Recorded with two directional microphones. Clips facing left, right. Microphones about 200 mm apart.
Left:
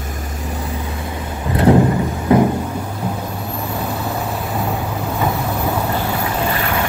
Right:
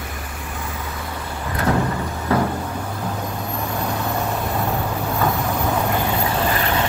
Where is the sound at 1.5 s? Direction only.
25° left (ahead or behind).